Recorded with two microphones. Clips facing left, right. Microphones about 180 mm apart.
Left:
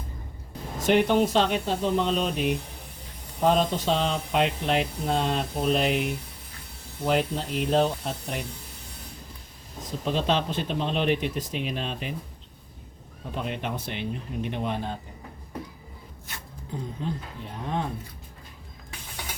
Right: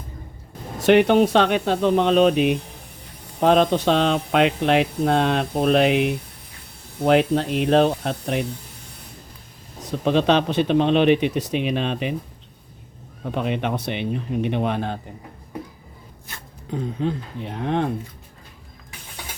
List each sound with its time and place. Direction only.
0.8 s speech: 70° right (ahead or behind)
9.8 s speech: 70° right (ahead or behind)
13.2 s speech: 70° right (ahead or behind)
16.7 s speech: 75° right (ahead or behind)